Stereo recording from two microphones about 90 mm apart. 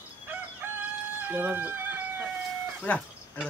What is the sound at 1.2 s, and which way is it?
Chicken, 20° right (ahead or behind).